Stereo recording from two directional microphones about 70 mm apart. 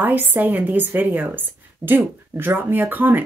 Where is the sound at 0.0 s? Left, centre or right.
Right.